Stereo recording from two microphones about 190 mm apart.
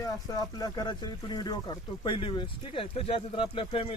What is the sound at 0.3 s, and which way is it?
Speech, 20° left (ahead or behind).